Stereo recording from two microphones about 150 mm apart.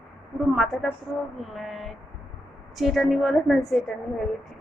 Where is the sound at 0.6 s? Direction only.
Centre (ahead or behind).